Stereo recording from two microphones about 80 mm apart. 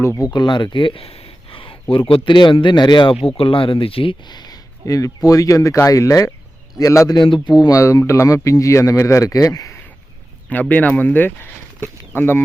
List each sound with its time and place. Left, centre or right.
0.3 s a man's voice: left
7.1 s a man's voice: left
7.6 s speech: left
10.5 s speech: left